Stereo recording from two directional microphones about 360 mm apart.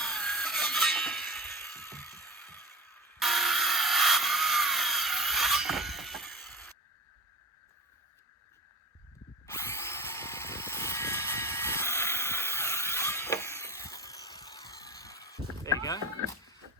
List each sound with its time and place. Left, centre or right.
0.0 s music: centre
9.5 s drill: centre
16.0 s a sound: right